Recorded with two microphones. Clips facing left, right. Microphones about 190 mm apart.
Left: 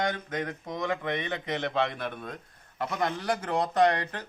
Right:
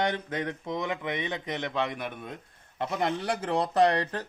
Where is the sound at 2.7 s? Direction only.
25° right (ahead or behind).